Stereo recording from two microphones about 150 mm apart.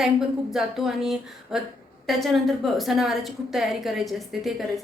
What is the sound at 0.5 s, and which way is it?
A woman's voice, centre (ahead or behind).